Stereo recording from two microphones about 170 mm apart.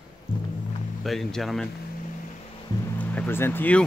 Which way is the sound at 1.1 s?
Centre (ahead or behind).